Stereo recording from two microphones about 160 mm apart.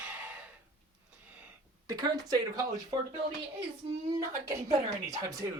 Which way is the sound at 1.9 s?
25° right (ahead or behind).